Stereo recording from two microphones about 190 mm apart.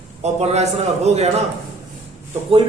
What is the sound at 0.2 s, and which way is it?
A man's voice, 35° right (ahead or behind).